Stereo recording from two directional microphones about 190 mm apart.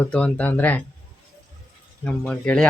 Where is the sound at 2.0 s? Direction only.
5° left (ahead or behind).